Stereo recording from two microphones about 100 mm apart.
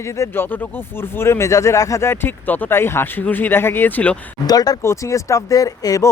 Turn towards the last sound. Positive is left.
turn(degrees=35)  # may be behind; listen again after turning